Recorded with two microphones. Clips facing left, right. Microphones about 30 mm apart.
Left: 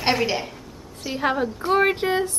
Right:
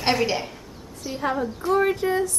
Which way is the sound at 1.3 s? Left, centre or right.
Left.